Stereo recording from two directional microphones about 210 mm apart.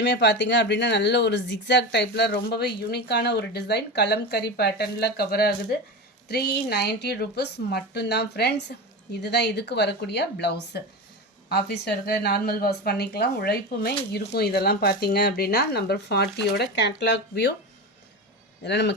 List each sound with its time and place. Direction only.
0.0 s a woman's voice: 55° left (ahead or behind)
18.6 s speech: 55° left (ahead or behind)